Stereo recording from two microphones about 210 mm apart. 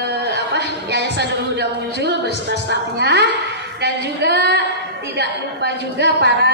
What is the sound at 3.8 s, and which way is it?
A woman's voice, 50° right (ahead or behind).